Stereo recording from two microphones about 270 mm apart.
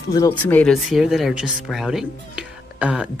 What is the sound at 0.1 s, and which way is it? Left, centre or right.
Speech, centre.